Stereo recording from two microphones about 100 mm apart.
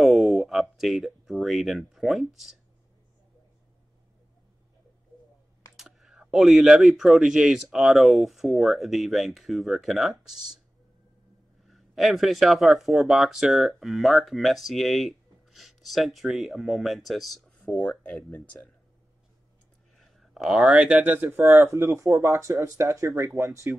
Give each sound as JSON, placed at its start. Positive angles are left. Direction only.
{"t": 0.0, "sound": "speech", "side_deg": 0}
{"t": 5.8, "sound": "speech", "side_deg": -5}
{"t": 11.6, "sound": "speech", "side_deg": 0}
{"t": 17.6, "sound": "speech", "side_deg": 15}
{"t": 20.0, "sound": "speech", "side_deg": 0}